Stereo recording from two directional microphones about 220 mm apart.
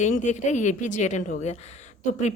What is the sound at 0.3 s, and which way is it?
A woman's voice, 35° left (ahead or behind).